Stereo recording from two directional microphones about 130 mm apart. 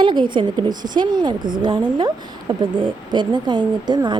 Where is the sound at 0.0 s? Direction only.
35° right (ahead or behind).